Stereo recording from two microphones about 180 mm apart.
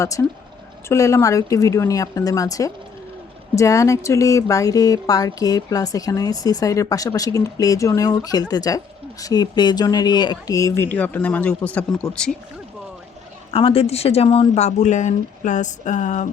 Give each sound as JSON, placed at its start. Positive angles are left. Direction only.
{"t": 0.0, "sound": "speech", "side_deg": 15}
{"t": 13.5, "sound": "speech", "side_deg": 30}